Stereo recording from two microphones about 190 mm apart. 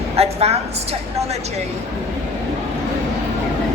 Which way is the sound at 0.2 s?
35° right (ahead or behind).